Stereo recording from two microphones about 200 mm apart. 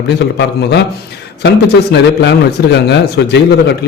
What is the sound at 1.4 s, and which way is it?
A man's voice, 60° left (ahead or behind).